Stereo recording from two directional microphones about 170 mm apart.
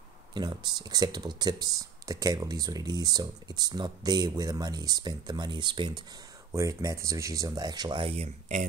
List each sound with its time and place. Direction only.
0.3 s speech: 25° right (ahead or behind); by 8.6 s 40° right (ahead or behind)